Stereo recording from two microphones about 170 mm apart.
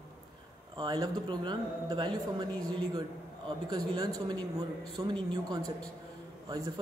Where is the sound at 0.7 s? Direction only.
25° right (ahead or behind).